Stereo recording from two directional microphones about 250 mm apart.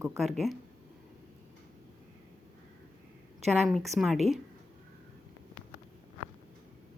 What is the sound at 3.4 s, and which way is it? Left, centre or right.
Speech, centre.